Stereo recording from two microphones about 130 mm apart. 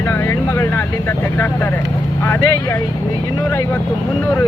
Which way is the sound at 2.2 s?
20° left (ahead or behind).